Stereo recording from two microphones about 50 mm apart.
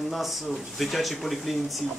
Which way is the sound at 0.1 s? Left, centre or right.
Centre.